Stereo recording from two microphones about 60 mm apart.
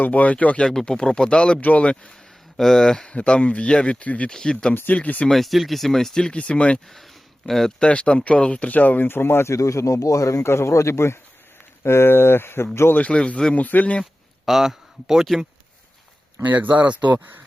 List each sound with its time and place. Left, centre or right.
0.0 s speech: left
0.7 s speech: centre
2.6 s speech: centre; by 4.3 s left
4.3 s speech: centre
4.7 s speech: left
5.2 s speech: centre
7.4 s speech: centre
7.8 s speech: centre; by 9.5 s left
9.5 s speech: left
13.0 s speech: centre
14.0 s a man's voice: centre
16.5 s speech: right